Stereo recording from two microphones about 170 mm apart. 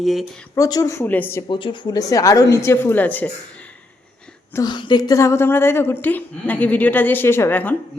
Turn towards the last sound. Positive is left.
turn(degrees=10)  # may be behind; listen again after turning